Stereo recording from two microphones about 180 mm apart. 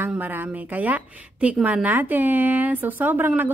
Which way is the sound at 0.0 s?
10° right (ahead or behind).